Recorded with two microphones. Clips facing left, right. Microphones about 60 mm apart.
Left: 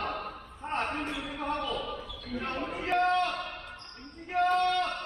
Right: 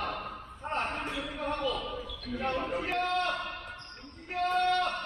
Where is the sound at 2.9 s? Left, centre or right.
Left.